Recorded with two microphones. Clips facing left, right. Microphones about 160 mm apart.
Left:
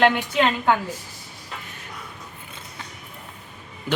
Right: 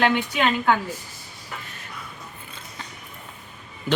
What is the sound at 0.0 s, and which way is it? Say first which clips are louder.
Speech: left 2 dB; 20° left (ahead or behind).